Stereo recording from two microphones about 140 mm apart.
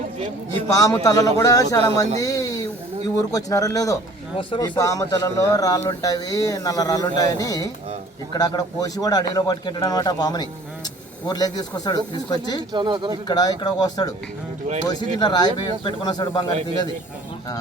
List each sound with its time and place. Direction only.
0.7 s a man's voice: 25° left (ahead or behind)
4.4 s speech: 35° left (ahead or behind)
4.8 s a man's voice: 25° left (ahead or behind)
12.7 s speech: 35° right (ahead or behind)
13.2 s a man's voice: 30° left (ahead or behind)